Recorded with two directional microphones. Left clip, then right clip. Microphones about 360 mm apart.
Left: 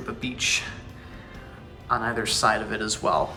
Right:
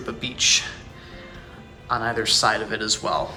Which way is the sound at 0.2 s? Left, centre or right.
Centre.